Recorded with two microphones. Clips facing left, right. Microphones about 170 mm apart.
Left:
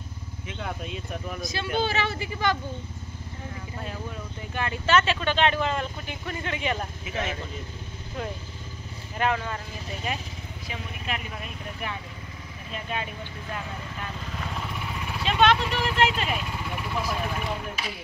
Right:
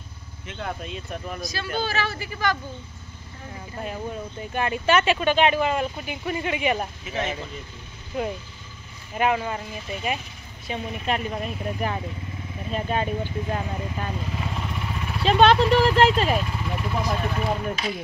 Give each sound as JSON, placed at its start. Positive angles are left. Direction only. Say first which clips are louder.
{"t": 0.5, "sound": "speech", "louder": "right 2 dB", "side_deg": 5}
{"t": 1.4, "sound": "speech", "louder": "left 2 dB", "side_deg": 25}
{"t": 4.6, "sound": "speech", "louder": "right 2 dB", "side_deg": -15}
{"t": 7.1, "sound": "speech", "louder": "right 2 dB", "side_deg": 5}
{"t": 9.2, "sound": "speech", "louder": "right 4 dB", "side_deg": -15}
{"t": 10.7, "sound": "speech", "louder": "right 8 dB", "side_deg": -35}
{"t": 14.4, "sound": "vehicle", "louder": "right 3 dB", "side_deg": -5}
{"t": 15.2, "sound": "speech", "louder": "right 5 dB", "side_deg": -35}
{"t": 16.5, "sound": "speech", "louder": "right 3 dB", "side_deg": 5}